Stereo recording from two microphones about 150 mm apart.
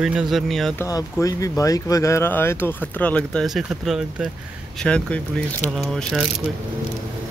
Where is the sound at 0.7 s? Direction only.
20° left (ahead or behind); by 6.3 s centre (ahead or behind).